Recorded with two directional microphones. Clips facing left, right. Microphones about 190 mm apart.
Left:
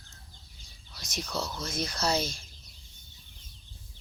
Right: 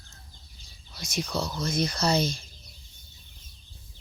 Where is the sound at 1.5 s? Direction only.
5° left (ahead or behind).